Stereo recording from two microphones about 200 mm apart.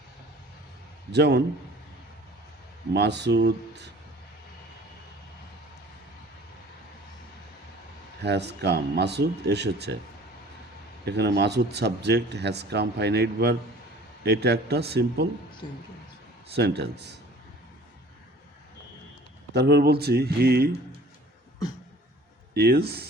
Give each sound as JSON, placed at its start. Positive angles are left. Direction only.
{"t": 1.1, "sound": "speech", "side_deg": -55}
{"t": 2.9, "sound": "speech", "side_deg": -60}
{"t": 8.2, "sound": "speech", "side_deg": -60}
{"t": 11.0, "sound": "speech", "side_deg": -55}
{"t": 15.6, "sound": "speech", "side_deg": 20}
{"t": 16.6, "sound": "speech", "side_deg": -55}
{"t": 19.5, "sound": "speech", "side_deg": -55}
{"t": 22.5, "sound": "speech", "side_deg": -50}